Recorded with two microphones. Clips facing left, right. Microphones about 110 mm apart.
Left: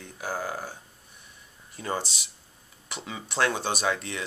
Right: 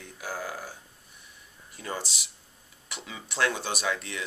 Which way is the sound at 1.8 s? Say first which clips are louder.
Left 4 dB; 25° left (ahead or behind).